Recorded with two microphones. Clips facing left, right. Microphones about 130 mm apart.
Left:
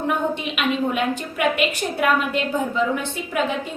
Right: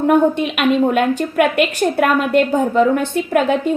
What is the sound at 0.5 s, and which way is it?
A woman's voice, 55° right (ahead or behind).